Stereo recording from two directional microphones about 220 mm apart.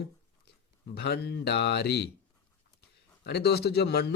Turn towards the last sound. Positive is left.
turn(degrees=50)  # may be behind; listen again after turning